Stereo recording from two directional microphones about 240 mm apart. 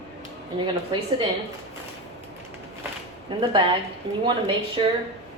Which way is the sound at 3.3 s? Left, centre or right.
Right.